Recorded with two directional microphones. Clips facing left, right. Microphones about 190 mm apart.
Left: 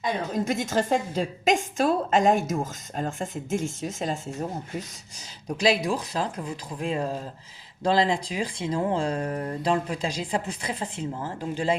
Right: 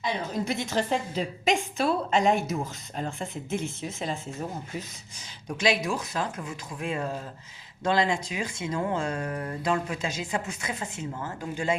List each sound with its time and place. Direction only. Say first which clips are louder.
0.0 s a woman's voice: left 3 dB; 45° left (ahead or behind)
5.5 s speech: left 3 dB; 35° left (ahead or behind)